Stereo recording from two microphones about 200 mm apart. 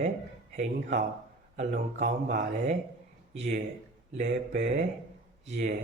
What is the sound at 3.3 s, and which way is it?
Speech, 40° right (ahead or behind).